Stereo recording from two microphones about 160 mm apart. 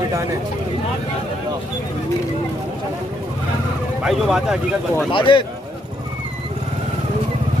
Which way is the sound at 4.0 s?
5° right (ahead or behind).